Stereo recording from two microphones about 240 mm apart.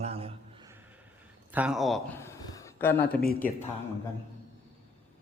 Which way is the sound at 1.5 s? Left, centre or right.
Centre.